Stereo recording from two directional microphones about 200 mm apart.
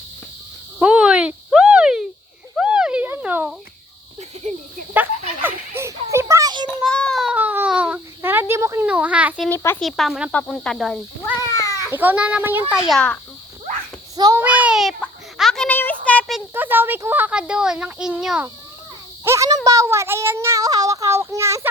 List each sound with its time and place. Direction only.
0.8 s a sound: 5° right (ahead or behind)
5.4 s children playing: 10° right (ahead or behind)
6.7 s baby cry: 5° left (ahead or behind)
9.8 s speech: centre (ahead or behind)
11.3 s cat: 15° left (ahead or behind)
11.9 s speech: 10° right (ahead or behind)
12.9 s speech: 5° left (ahead or behind)
14.2 s a child's voice: 20° right (ahead or behind)
14.4 s a sound: 5° right (ahead or behind)
19.2 s speech: 15° right (ahead or behind)